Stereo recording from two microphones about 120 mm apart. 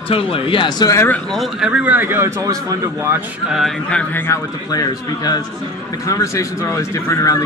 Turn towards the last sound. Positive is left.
turn(degrees=25)  # may be behind; listen again after turning